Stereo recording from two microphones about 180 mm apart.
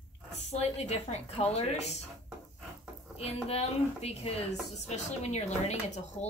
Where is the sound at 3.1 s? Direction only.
35° left (ahead or behind).